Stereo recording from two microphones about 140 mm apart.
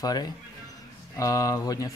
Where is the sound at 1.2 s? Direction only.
25° left (ahead or behind).